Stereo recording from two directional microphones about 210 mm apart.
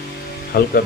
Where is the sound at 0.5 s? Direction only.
45° left (ahead or behind).